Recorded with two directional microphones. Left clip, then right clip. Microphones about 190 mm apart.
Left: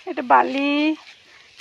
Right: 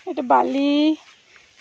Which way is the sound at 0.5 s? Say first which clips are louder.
Right 2 dB; 25° right (ahead or behind).